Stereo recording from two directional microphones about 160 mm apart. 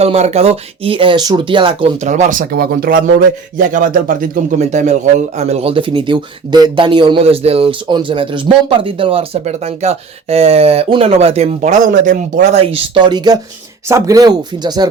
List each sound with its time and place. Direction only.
0.0 s a man's voice: 40° right (ahead or behind)
2.0 s a man's voice: 50° right (ahead or behind)
12.5 s speech: 35° right (ahead or behind)